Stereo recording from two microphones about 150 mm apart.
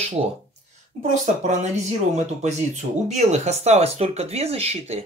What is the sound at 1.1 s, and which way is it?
Speech, 55° right (ahead or behind).